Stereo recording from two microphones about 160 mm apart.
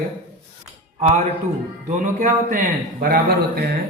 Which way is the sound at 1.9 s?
55° right (ahead or behind).